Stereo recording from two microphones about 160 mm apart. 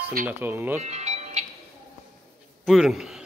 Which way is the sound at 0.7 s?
45° right (ahead or behind).